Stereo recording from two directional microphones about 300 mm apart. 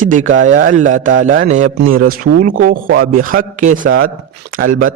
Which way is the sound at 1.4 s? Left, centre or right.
Right.